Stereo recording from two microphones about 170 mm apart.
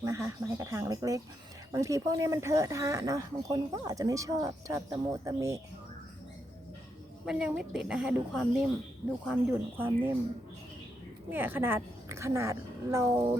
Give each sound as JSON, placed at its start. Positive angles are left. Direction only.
{"t": 0.0, "sound": "a woman's voice", "side_deg": -20}
{"t": 7.3, "sound": "a woman's voice", "side_deg": -5}
{"t": 11.3, "sound": "a woman's voice", "side_deg": -10}